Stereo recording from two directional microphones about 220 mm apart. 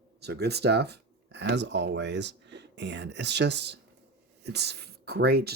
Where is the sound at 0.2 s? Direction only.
50° right (ahead or behind).